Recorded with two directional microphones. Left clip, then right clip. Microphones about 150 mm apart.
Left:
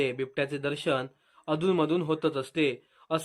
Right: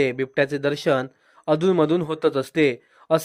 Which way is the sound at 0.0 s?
35° right (ahead or behind).